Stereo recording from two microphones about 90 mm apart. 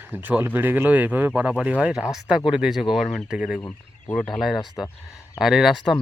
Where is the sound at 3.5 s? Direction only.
15° left (ahead or behind).